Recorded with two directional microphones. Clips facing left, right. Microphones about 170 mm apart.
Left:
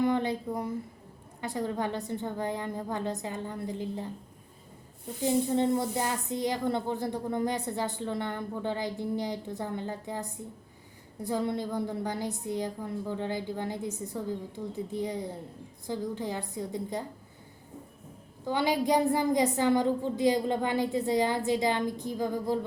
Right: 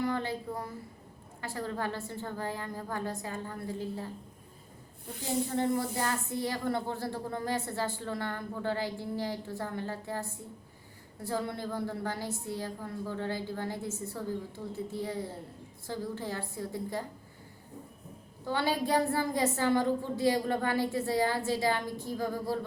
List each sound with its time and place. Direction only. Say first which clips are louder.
0.0 s a sound: left 5 dB; 20° left (ahead or behind)
1.4 s speech: left 4 dB; 20° left (ahead or behind)
5.5 s a woman's voice: left 3 dB; 20° left (ahead or behind)
18.4 s a woman's voice: left 3 dB; 15° left (ahead or behind)